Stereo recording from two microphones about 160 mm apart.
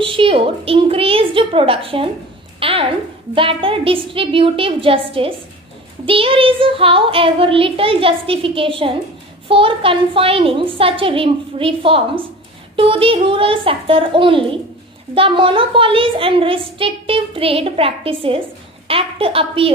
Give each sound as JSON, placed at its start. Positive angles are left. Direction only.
{"t": 0.0, "sound": "a woman's voice", "side_deg": -35}
{"t": 6.0, "sound": "a woman's voice", "side_deg": -35}